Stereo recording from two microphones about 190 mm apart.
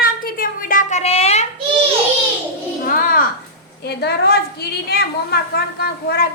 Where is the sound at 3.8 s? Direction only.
55° left (ahead or behind).